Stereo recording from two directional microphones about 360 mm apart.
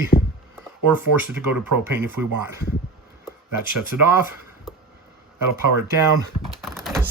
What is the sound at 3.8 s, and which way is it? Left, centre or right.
Speech, centre.